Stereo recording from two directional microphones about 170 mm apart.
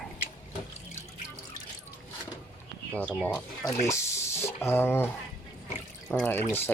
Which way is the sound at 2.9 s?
5° left (ahead or behind).